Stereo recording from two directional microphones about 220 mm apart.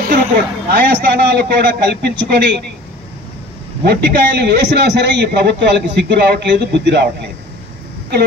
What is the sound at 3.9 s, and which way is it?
A man's voice, 50° right (ahead or behind).